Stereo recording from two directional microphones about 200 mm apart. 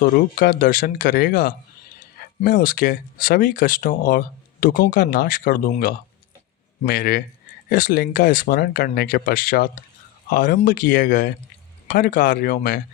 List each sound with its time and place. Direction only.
0.0 s speech: 45° left (ahead or behind)